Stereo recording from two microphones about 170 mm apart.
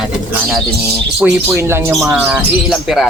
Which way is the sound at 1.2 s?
15° right (ahead or behind).